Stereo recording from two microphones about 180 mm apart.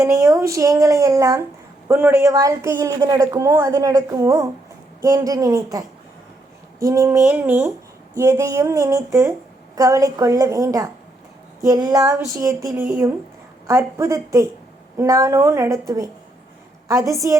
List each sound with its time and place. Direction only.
0.0 s speech: 15° right (ahead or behind)
6.7 s speech: 15° right (ahead or behind)